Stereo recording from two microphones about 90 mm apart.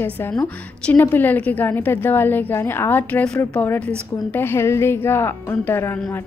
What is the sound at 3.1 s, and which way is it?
Speech, 15° left (ahead or behind).